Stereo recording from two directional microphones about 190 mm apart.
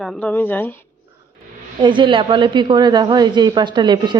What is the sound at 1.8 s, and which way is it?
Speech, 25° right (ahead or behind).